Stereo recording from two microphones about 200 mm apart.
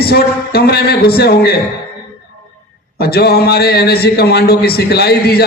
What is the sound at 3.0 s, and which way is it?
A man's voice, 50° left (ahead or behind).